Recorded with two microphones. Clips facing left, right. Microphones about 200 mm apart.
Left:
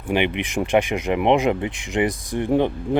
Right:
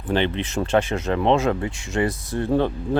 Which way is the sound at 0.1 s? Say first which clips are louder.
Left 1 dB; 15° left (ahead or behind).